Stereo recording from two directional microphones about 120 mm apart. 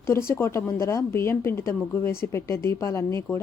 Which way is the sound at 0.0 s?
20° left (ahead or behind).